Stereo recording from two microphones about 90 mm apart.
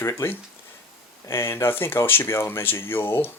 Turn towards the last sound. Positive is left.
turn(degrees=25)  # may be behind; listen again after turning